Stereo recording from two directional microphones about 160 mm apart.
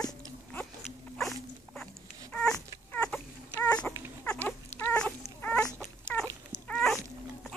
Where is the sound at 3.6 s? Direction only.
10° left (ahead or behind).